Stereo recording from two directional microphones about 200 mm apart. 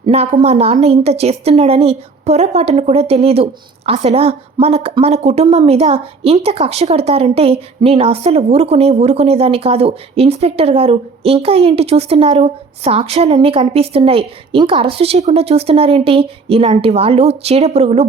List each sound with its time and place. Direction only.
0.0 s a woman's voice: 30° right (ahead or behind)